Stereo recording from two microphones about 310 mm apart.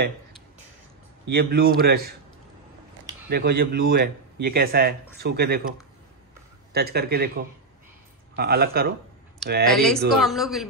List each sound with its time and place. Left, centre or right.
1.3 s speech: right
3.3 s speech: right
6.7 s speech: right
8.4 s speech: right
9.7 s speech: centre